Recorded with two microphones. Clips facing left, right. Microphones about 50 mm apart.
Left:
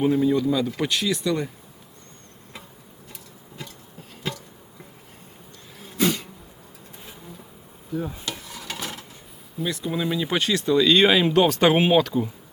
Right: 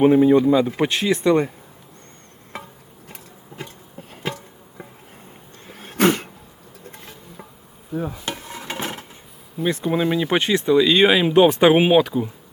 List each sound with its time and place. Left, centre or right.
0.0 s speech: right
3.6 s insect: right
5.6 s a sound: right
8.1 s stir: right
9.6 s speech: right; by 12.3 s centre